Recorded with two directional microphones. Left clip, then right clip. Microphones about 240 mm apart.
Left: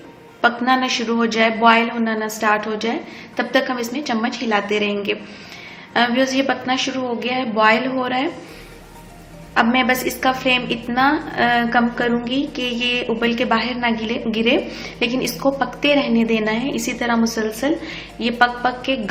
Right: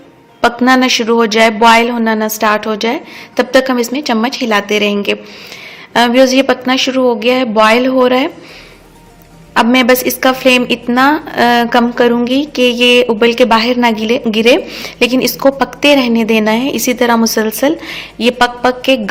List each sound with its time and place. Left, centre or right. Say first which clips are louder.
0.4 s a woman's voice: right 7 dB; right
9.6 s a woman's voice: right 7 dB; right